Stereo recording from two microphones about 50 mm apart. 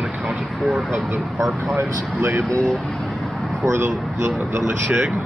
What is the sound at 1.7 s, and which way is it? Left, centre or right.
Speech, right.